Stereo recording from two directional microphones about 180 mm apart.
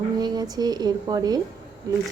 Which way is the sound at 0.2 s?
20° right (ahead or behind).